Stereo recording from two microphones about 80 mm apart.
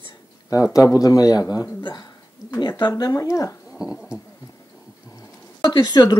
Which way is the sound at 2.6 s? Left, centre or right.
Left.